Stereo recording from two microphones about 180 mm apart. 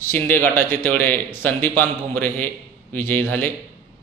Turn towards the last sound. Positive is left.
turn(degrees=10)  # may be behind; listen again after turning